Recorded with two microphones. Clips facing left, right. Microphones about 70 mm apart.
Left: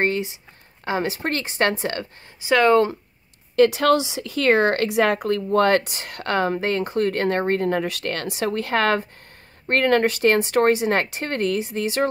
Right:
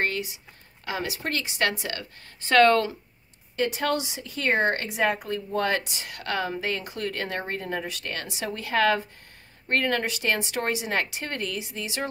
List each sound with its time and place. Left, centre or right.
0.0 s a sound: left
0.8 s a woman's voice: left
2.4 s speech: centre
3.5 s speech: left